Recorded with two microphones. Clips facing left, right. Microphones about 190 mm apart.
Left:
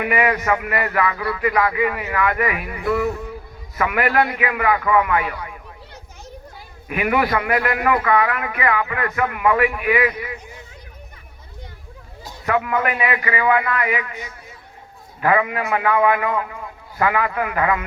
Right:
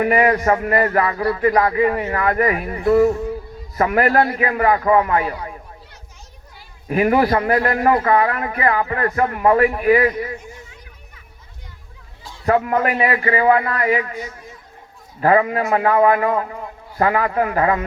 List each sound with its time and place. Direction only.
0.0 s a man's voice: 35° right (ahead or behind)
6.8 s a man's voice: 35° right (ahead or behind)
12.5 s a man's voice: 35° right (ahead or behind)